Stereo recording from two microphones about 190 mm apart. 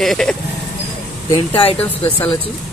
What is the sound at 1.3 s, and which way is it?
Speech, 30° left (ahead or behind).